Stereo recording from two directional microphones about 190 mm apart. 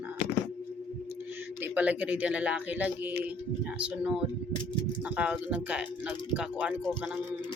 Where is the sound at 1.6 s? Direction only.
10° right (ahead or behind).